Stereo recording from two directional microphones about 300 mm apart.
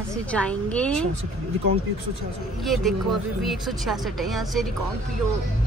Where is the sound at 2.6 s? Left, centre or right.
Centre.